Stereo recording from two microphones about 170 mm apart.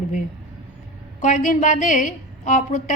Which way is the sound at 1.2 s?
50° left (ahead or behind).